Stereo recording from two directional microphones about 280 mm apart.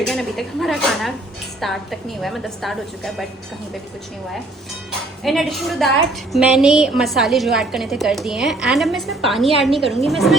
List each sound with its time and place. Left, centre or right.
0.0 s a woman's voice: centre
5.2 s a woman's voice: centre